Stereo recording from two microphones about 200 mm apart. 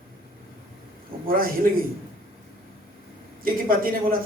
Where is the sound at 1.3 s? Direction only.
45° right (ahead or behind).